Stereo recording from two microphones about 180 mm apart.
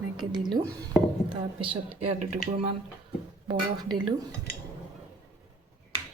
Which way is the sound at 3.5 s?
25° right (ahead or behind).